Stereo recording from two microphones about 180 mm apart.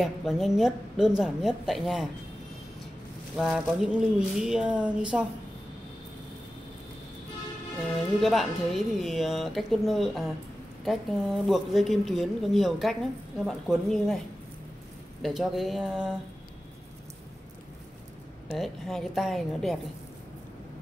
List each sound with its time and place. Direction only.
0.0 s speech: centre (ahead or behind)
3.3 s speech: centre (ahead or behind)
8.2 s speech: centre (ahead or behind)
15.2 s speech: centre (ahead or behind)
18.6 s speech: centre (ahead or behind)